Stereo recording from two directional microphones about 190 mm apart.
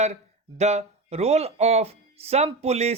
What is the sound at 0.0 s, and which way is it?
Speech, 35° right (ahead or behind).